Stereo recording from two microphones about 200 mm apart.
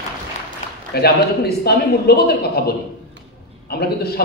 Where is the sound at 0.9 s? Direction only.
50° left (ahead or behind).